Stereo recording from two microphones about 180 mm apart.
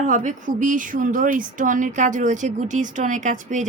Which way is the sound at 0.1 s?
45° right (ahead or behind).